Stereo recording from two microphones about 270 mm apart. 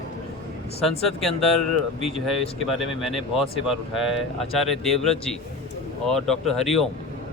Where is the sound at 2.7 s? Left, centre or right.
Centre.